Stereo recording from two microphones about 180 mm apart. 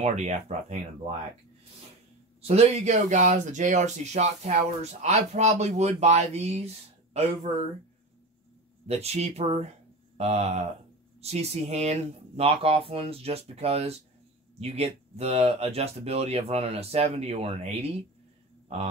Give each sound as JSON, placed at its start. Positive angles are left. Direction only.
{"t": 0.0, "sound": "speech", "side_deg": -40}
{"t": 2.4, "sound": "speech", "side_deg": -35}
{"t": 8.8, "sound": "speech", "side_deg": -35}